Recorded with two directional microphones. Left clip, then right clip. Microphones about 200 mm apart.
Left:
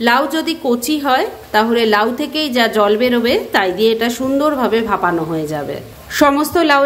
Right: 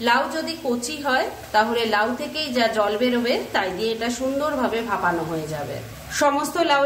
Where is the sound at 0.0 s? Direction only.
40° left (ahead or behind).